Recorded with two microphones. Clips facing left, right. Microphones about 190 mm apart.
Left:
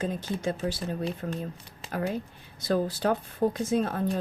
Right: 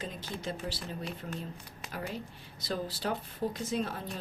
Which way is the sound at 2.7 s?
50° left (ahead or behind).